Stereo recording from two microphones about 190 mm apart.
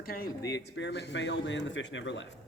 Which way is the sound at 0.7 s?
65° left (ahead or behind).